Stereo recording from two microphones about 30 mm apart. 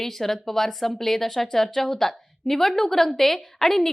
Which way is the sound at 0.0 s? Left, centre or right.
Centre.